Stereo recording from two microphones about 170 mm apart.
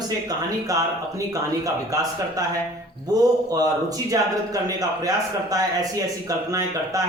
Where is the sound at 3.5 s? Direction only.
20° right (ahead or behind).